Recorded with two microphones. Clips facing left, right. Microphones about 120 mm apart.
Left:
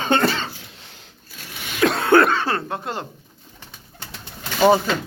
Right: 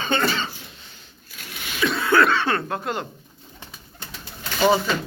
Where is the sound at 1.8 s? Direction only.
60° left (ahead or behind); by 2.6 s 35° left (ahead or behind).